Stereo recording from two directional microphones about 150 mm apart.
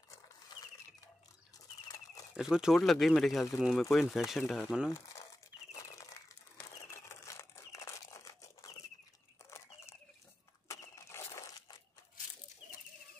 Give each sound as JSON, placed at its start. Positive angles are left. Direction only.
{"t": 2.3, "sound": "speech", "side_deg": -5}
{"t": 4.9, "sound": "crumpling", "side_deg": 20}
{"t": 6.9, "sound": "a sound", "side_deg": 20}
{"t": 10.7, "sound": "crushing", "side_deg": 20}